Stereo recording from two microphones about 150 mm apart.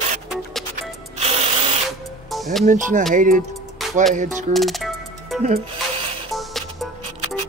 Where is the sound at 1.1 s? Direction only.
45° right (ahead or behind).